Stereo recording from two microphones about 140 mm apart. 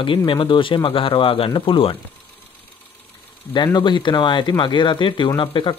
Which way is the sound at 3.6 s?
30° left (ahead or behind).